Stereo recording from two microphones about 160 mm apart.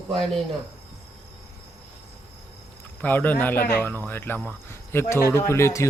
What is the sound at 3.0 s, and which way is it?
Speech, 10° left (ahead or behind).